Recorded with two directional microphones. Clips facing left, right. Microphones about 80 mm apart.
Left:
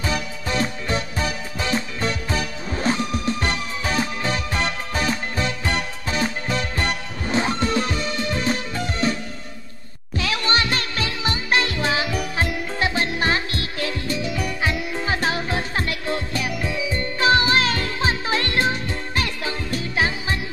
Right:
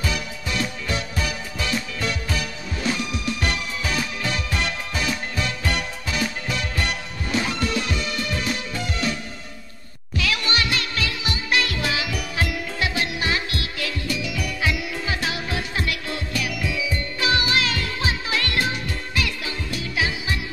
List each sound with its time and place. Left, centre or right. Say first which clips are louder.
0.0 s music: left 2 dB; left
10.1 s music: left 2 dB; left